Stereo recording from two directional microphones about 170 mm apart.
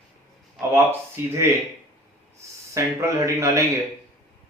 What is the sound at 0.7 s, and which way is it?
A man's voice, 15° right (ahead or behind).